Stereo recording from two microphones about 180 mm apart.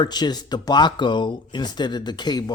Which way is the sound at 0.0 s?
25° left (ahead or behind).